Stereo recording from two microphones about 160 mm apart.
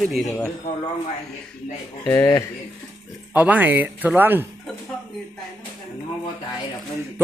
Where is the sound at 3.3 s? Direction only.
10° right (ahead or behind).